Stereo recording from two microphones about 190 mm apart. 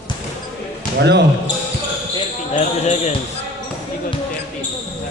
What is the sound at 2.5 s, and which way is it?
Basketball bounce, 40° left (ahead or behind).